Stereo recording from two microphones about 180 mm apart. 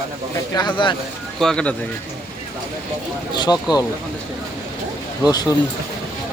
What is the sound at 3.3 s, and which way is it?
Speech, 25° left (ahead or behind).